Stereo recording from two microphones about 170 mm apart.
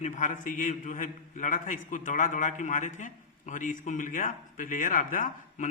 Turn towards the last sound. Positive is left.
turn(degrees=50)  # may be behind; listen again after turning